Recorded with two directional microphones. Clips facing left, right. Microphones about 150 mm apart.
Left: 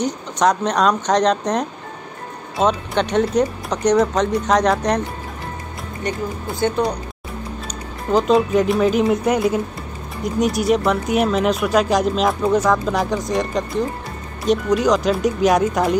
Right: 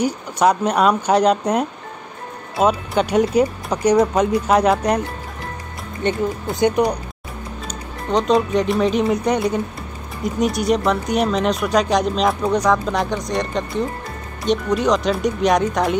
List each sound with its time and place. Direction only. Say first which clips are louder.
0.0 s speech: right 1 dB; 10° right (ahead or behind)
6.0 s speech: right 4 dB; 20° right (ahead or behind)
8.1 s speech: left 1 dB; centre (ahead or behind)